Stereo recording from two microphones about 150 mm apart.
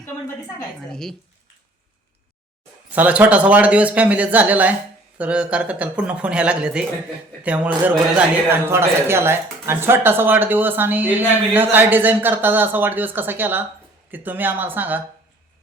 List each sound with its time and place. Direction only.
0.9 s speech: 5° left (ahead or behind)
2.9 s speech: 10° right (ahead or behind)